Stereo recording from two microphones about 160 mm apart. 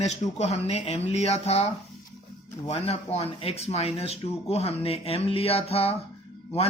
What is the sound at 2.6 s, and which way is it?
Speech, 40° left (ahead or behind).